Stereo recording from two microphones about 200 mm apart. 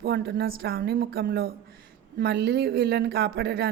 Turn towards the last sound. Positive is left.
turn(degrees=-55)  # may be behind; listen again after turning